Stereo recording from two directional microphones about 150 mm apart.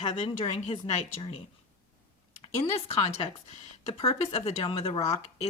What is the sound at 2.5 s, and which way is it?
Speech, 40° left (ahead or behind).